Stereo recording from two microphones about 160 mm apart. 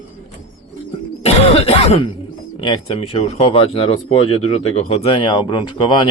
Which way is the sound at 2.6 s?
35° left (ahead or behind).